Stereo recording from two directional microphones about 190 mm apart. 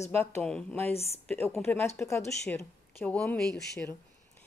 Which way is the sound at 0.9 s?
30° left (ahead or behind).